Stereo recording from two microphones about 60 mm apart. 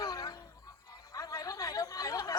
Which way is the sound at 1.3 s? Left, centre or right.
Left.